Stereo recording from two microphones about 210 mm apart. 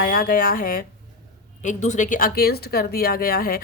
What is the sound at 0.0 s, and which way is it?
Speech, 45° left (ahead or behind).